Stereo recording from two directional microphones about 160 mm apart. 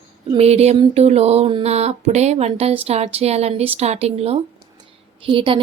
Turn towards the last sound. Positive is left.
turn(degrees=-35)  # may be behind; listen again after turning